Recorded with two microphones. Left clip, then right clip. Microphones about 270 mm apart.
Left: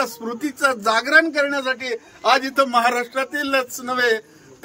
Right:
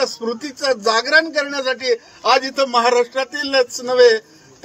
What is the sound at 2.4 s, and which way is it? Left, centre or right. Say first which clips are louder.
A man's voice: right 1 dB; centre.